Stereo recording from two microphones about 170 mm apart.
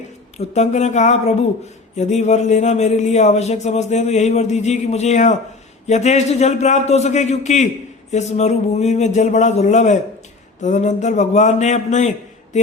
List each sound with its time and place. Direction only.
0.3 s a man's voice: 40° left (ahead or behind)